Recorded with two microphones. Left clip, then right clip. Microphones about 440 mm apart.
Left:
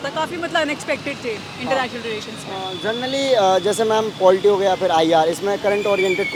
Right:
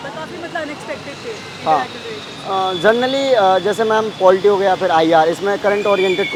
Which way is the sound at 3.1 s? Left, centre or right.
Centre.